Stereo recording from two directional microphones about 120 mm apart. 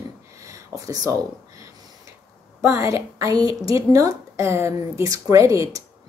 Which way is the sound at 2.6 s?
25° right (ahead or behind).